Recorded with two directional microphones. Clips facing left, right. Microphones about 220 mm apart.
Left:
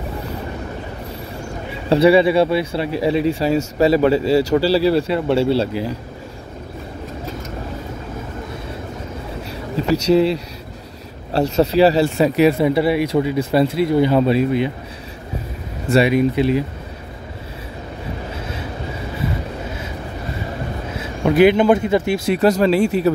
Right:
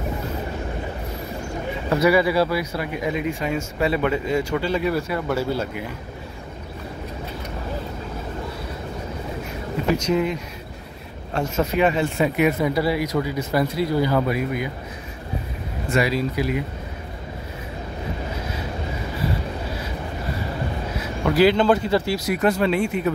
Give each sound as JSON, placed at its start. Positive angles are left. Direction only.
{"t": 1.9, "sound": "speech", "side_deg": 30}
{"t": 10.0, "sound": "speech", "side_deg": 35}
{"t": 15.9, "sound": "speech", "side_deg": 25}
{"t": 20.9, "sound": "speech", "side_deg": 25}